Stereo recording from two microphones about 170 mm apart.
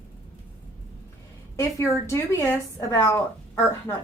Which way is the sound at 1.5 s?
15° left (ahead or behind).